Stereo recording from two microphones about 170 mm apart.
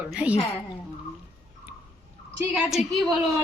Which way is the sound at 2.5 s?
Centre (ahead or behind).